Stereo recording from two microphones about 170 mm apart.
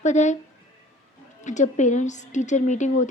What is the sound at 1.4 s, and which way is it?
A woman's voice, 45° left (ahead or behind).